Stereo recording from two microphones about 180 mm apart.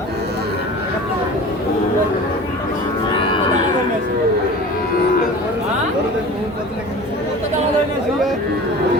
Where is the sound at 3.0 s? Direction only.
30° left (ahead or behind).